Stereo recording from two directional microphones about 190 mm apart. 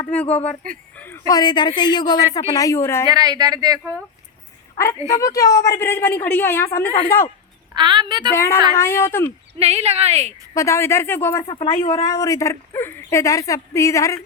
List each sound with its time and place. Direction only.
0.0 s a woman's voice: 5° left (ahead or behind)
0.3 s speech: 35° left (ahead or behind)
0.9 s a sound: 10° left (ahead or behind)
1.3 s a woman's voice: 20° left (ahead or behind)
3.1 s speech: 20° right (ahead or behind)
4.8 s a woman's voice: 15° left (ahead or behind)
7.8 s speech: 25° right (ahead or behind)
8.7 s a woman's voice: 15° left (ahead or behind)
9.6 s a woman's voice: 35° right (ahead or behind)
10.5 s a woman's voice: 15° left (ahead or behind)
11.4 s a woman's voice: 25° left (ahead or behind)